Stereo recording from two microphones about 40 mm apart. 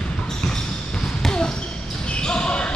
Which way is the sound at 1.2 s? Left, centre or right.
Centre.